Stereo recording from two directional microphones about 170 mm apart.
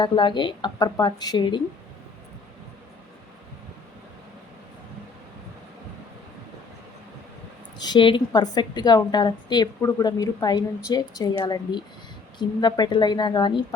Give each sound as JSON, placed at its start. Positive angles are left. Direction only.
{"t": 0.0, "sound": "a woman's voice", "side_deg": 30}
{"t": 7.8, "sound": "a woman's voice", "side_deg": 25}